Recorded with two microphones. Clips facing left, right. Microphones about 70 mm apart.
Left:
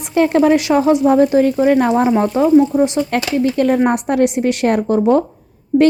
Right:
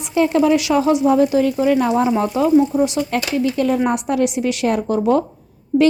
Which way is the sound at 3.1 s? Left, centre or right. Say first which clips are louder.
Left 3 dB; left.